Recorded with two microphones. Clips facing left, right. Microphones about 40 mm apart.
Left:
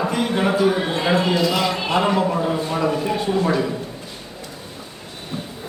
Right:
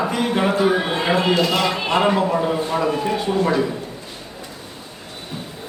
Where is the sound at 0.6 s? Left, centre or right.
Right.